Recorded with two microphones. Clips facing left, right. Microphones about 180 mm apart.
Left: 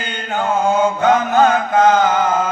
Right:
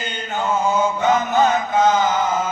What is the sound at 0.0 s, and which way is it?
Mantra, 60° left (ahead or behind).